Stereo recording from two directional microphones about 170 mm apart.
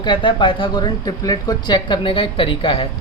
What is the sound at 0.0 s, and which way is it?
Speech, 30° left (ahead or behind).